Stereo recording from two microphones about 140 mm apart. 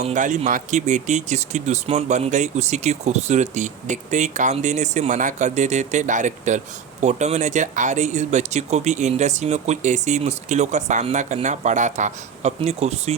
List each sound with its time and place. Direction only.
0.0 s speech: 60° right (ahead or behind)